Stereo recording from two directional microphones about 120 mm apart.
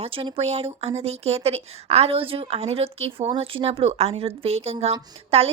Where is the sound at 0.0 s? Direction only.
50° right (ahead or behind).